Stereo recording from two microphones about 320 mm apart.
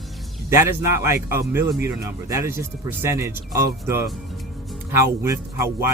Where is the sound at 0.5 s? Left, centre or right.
Centre.